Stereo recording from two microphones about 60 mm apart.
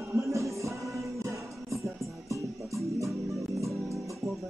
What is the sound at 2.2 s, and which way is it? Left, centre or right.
Music, right.